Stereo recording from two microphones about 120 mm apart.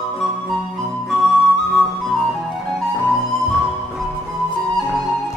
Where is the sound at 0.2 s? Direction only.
Centre (ahead or behind).